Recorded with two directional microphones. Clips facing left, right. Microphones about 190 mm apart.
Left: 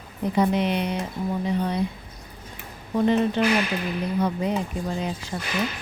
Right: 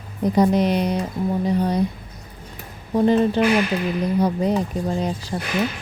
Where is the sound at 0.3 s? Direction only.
40° right (ahead or behind).